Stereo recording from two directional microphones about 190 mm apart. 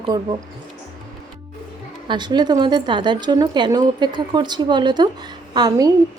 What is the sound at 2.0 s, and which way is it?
A woman's voice, 25° right (ahead or behind).